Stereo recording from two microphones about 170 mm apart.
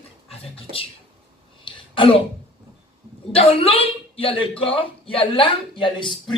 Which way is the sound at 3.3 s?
35° left (ahead or behind).